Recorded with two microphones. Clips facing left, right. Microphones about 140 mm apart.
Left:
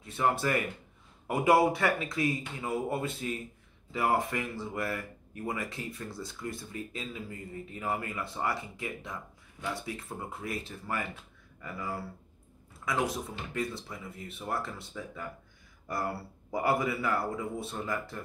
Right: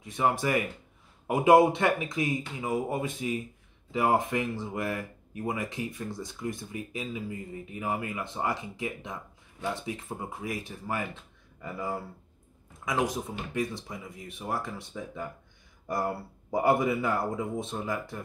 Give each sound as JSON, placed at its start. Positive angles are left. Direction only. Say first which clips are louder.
{"t": 0.0, "sound": "a man's voice", "louder": "right 2 dB", "side_deg": -15}